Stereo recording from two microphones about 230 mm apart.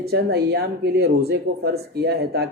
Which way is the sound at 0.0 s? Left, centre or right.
Right.